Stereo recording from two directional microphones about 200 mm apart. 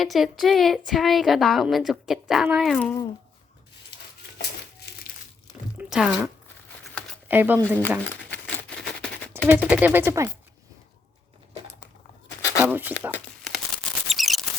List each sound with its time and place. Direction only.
0.0 s a woman's voice: centre (ahead or behind)
4.4 s crumpling: 55° left (ahead or behind)
5.7 s a sound: 5° right (ahead or behind)
7.3 s speech: 10° right (ahead or behind)
7.8 s crumpling: 10° left (ahead or behind)
9.5 s speech: 5° right (ahead or behind)
12.4 s a sound: 15° left (ahead or behind)
12.6 s speech: 10° right (ahead or behind)
14.1 s a sound: centre (ahead or behind)